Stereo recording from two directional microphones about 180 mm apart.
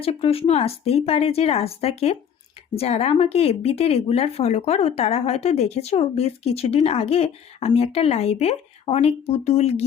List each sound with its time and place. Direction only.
0.0 s speech: 35° left (ahead or behind)